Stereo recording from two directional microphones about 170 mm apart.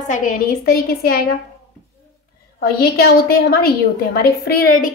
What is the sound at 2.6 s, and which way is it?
A woman's voice, 65° left (ahead or behind).